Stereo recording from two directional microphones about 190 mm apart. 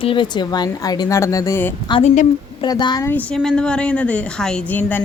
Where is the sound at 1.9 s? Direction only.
30° left (ahead or behind).